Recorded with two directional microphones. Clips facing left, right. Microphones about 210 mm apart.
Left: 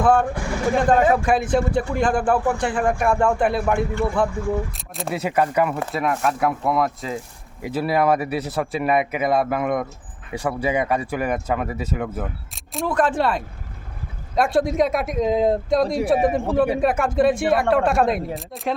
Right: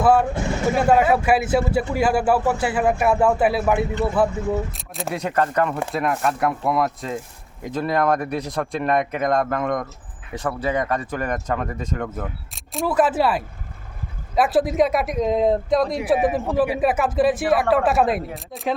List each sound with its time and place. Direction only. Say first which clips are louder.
0.0 s a man's voice: right 1 dB; 5° right (ahead or behind)
0.3 s speech: right 1 dB; 25° right (ahead or behind)
0.8 s a man's voice: even; 5° right (ahead or behind)
3.9 s speech: right 1 dB; 20° right (ahead or behind)
4.7 s speech: even; centre (ahead or behind)